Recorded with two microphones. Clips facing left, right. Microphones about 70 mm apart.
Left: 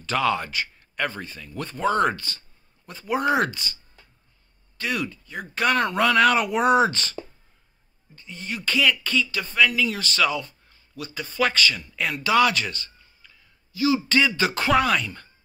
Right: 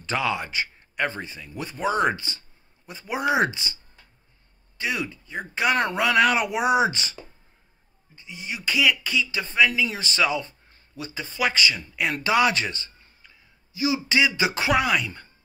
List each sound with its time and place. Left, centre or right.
0.2 s speech: centre
0.5 s speech: right
4.7 s speech: centre
8.2 s speech: centre
10.7 s a sound: right
11.4 s speech: centre